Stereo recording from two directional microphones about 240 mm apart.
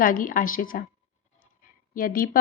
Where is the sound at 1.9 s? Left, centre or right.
Left.